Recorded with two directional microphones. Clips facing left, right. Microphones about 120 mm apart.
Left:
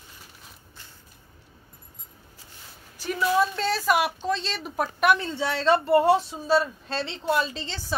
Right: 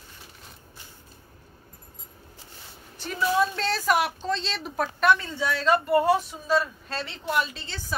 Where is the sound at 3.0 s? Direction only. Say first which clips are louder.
Left 1 dB; 5° left (ahead or behind).